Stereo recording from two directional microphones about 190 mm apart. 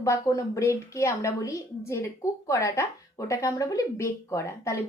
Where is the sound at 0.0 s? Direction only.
15° left (ahead or behind).